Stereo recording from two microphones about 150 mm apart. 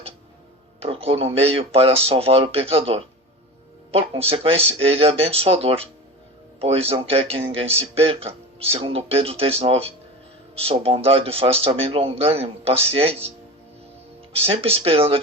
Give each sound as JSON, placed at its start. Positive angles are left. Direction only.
{"t": 0.8, "sound": "speech", "side_deg": -40}
{"t": 14.3, "sound": "speech", "side_deg": -40}